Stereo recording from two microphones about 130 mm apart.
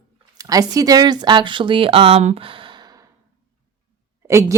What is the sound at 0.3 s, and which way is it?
Speech, 30° right (ahead or behind).